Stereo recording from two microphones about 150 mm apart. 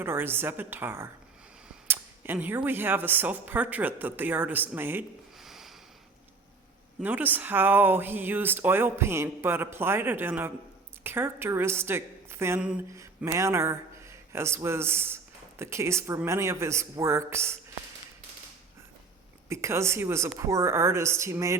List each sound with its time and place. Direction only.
0.0 s speech: 15° right (ahead or behind)
5.4 s a sound: centre (ahead or behind)
7.0 s speech: 10° right (ahead or behind)
19.5 s speech: 20° right (ahead or behind)